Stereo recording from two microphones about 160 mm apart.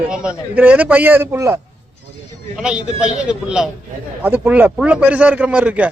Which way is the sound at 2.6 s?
5° right (ahead or behind).